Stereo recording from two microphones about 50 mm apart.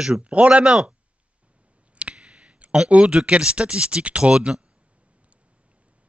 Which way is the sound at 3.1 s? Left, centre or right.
Right.